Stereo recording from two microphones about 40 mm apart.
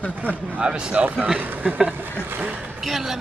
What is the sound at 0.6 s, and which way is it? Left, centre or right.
Speech, right.